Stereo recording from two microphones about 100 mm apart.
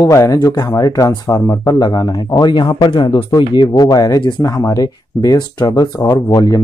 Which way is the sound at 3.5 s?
45° left (ahead or behind).